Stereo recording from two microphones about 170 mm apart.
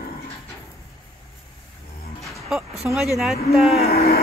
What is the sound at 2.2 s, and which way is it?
Music, centre (ahead or behind).